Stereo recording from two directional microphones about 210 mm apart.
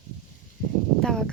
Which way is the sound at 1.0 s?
Centre (ahead or behind).